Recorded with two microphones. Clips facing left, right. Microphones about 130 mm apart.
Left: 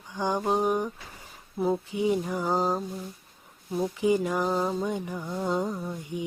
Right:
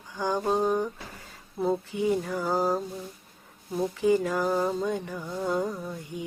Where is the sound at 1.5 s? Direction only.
5° left (ahead or behind).